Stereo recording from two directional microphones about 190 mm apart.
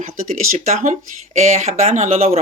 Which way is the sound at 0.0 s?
40° right (ahead or behind).